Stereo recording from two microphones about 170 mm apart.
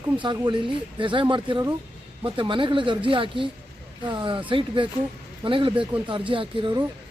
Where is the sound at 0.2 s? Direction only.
25° right (ahead or behind).